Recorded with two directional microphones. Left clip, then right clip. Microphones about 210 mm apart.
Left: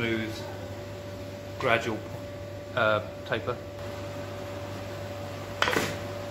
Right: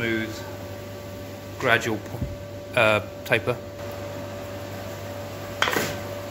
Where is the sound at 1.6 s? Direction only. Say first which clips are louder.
Right 4 dB; 35° right (ahead or behind).